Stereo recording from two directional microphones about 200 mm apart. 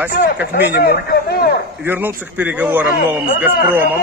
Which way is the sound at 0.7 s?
55° left (ahead or behind).